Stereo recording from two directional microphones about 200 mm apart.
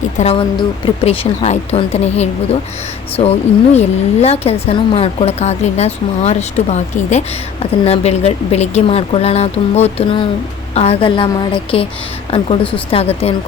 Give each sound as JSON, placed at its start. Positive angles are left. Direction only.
{"t": 0.2, "sound": "a woman's voice", "side_deg": 30}